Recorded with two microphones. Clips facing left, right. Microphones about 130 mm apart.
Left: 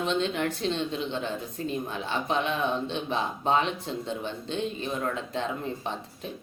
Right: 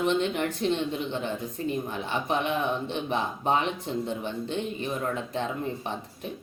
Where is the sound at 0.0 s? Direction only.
15° right (ahead or behind).